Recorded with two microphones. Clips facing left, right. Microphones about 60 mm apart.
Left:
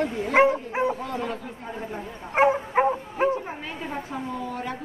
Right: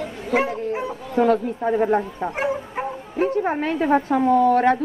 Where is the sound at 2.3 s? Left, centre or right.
Left.